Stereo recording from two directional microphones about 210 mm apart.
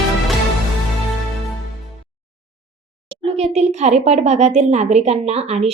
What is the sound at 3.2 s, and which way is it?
A woman's voice, 30° right (ahead or behind).